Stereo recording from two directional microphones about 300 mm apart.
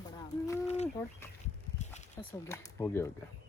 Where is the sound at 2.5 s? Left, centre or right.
Centre.